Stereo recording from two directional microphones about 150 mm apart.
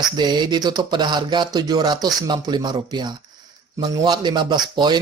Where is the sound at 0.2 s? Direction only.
30° right (ahead or behind).